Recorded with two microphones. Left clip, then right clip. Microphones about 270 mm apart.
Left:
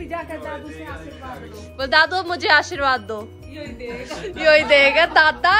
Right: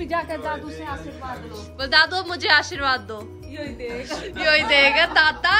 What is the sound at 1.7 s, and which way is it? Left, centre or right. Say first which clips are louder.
A woman's voice: left 2 dB; centre.